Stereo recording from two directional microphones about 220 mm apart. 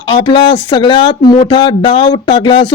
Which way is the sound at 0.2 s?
20° left (ahead or behind).